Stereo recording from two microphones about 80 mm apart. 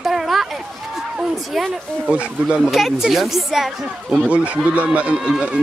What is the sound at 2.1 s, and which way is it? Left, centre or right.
Speech, centre.